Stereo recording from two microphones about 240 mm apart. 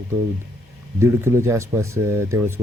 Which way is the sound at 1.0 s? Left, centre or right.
Centre.